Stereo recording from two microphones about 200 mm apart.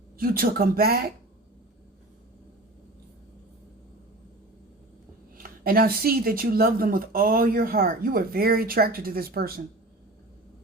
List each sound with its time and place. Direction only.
0.2 s speech: 45° right (ahead or behind)
5.4 s speech: 45° right (ahead or behind)